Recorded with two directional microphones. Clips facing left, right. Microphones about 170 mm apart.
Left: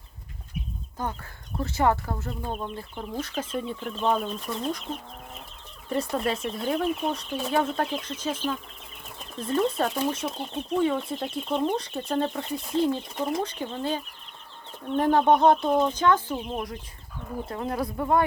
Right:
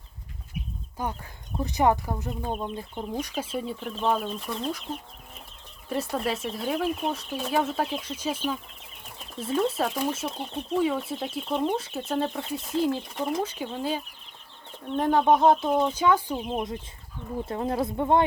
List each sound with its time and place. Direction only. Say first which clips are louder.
1.0 s speech: even; 10° right (ahead or behind)
5.9 s speech: left 1 dB; centre (ahead or behind)
17.5 s speech: right 2 dB; 25° right (ahead or behind)